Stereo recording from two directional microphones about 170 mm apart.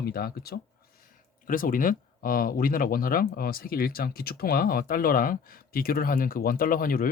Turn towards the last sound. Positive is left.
turn(degrees=55)  # may be behind; listen again after turning